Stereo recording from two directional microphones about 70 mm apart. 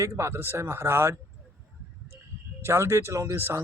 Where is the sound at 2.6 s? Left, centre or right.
Right.